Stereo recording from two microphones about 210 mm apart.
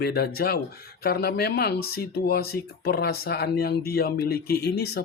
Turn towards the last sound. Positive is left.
turn(degrees=50)  # may be behind; listen again after turning